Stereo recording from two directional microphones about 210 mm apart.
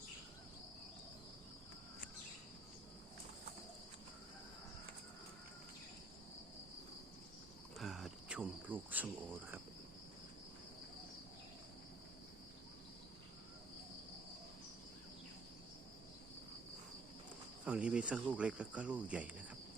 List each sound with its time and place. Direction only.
7.8 s cricket: centre (ahead or behind)
17.7 s speech: 5° right (ahead or behind)